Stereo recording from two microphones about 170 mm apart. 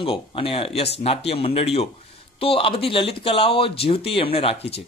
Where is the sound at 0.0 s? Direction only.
35° left (ahead or behind).